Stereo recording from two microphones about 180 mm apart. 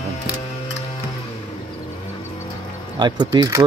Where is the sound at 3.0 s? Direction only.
25° right (ahead or behind).